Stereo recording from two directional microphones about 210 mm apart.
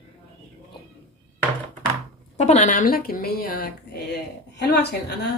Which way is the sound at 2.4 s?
35° left (ahead or behind).